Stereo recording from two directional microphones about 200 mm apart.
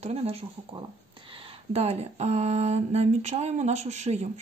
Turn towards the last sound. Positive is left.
turn(degrees=-35)  # may be behind; listen again after turning